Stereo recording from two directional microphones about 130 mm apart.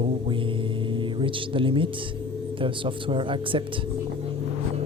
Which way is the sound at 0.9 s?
40° right (ahead or behind).